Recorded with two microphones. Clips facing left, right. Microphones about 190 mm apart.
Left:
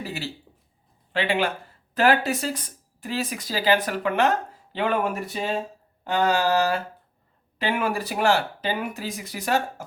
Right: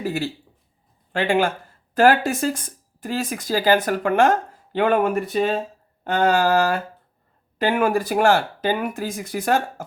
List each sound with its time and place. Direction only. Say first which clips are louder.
0.0 s speech: right 7 dB; 50° right (ahead or behind)